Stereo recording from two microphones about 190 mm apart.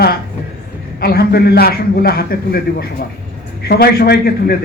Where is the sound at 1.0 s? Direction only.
55° left (ahead or behind).